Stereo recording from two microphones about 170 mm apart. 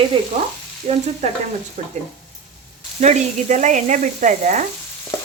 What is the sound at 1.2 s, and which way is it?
Frying, 40° right (ahead or behind).